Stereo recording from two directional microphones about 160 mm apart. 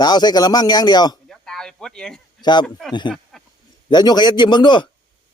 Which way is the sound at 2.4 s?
25° left (ahead or behind).